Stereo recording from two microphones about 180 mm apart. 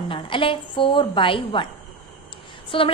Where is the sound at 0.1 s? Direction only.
30° left (ahead or behind).